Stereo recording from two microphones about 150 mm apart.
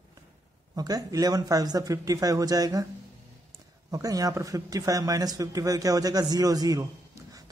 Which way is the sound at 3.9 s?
25° right (ahead or behind).